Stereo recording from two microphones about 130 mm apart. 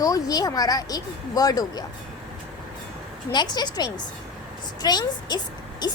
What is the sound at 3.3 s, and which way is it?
A child's voice, 35° left (ahead or behind).